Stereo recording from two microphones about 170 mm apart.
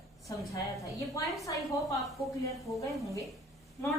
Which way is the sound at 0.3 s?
20° left (ahead or behind).